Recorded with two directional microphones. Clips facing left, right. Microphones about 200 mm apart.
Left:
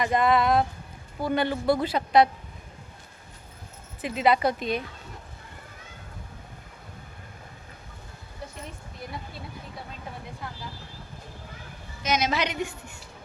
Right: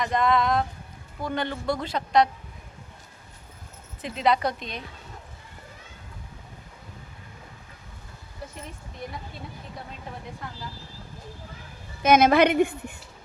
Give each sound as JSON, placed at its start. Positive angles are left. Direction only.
{"t": 0.0, "sound": "speech", "side_deg": 5}
{"t": 4.0, "sound": "speech", "side_deg": 5}
{"t": 12.0, "sound": "a woman's voice", "side_deg": -55}